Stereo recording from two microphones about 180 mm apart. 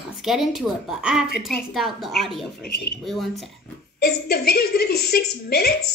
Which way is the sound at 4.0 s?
60° left (ahead or behind).